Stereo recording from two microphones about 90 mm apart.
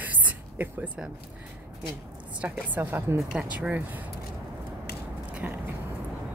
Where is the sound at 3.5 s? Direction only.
15° right (ahead or behind).